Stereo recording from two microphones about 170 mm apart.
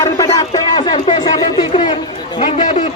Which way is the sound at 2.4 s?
45° left (ahead or behind).